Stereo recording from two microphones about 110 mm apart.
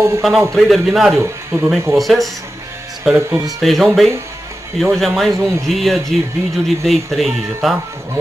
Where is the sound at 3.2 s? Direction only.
30° right (ahead or behind).